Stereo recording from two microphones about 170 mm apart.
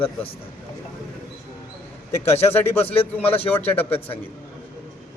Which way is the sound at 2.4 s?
15° left (ahead or behind).